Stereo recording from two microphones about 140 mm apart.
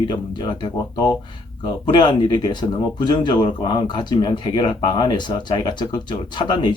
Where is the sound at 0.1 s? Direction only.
35° left (ahead or behind).